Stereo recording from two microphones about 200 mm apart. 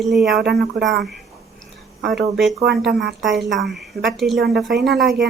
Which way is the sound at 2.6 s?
55° right (ahead or behind).